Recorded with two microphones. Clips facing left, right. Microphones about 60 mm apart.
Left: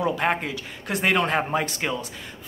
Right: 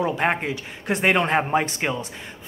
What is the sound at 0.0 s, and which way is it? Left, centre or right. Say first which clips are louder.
Speech: right 1 dB; centre.